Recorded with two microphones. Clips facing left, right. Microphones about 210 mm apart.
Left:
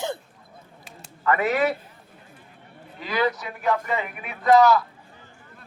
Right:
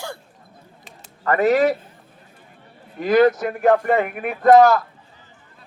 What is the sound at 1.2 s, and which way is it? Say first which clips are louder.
Speech: right 5 dB; 40° right (ahead or behind).